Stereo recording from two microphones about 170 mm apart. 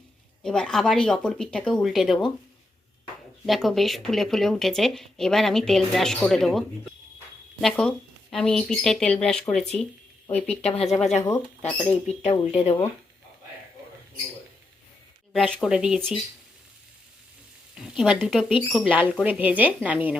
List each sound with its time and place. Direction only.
0.4 s speech: 5° left (ahead or behind)
3.4 s speech: centre (ahead or behind)
12.2 s speech: 35° left (ahead or behind)
15.3 s speech: 5° left (ahead or behind)
17.7 s speech: 5° right (ahead or behind)